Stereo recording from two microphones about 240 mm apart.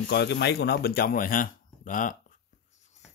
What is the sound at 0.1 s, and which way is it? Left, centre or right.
Speech, left.